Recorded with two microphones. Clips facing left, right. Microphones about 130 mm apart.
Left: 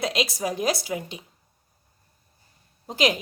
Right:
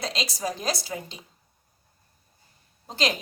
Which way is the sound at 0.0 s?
5° left (ahead or behind).